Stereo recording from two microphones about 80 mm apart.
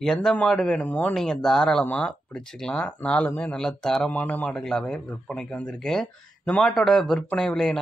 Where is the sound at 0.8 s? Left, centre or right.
Centre.